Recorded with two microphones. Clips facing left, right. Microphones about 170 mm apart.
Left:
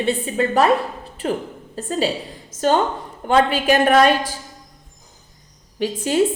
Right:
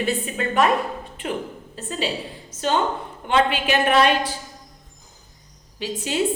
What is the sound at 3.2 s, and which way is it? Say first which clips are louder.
Speech: left 4 dB; 40° left (ahead or behind).